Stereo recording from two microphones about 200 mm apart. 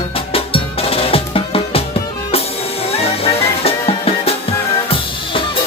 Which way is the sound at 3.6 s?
30° left (ahead or behind).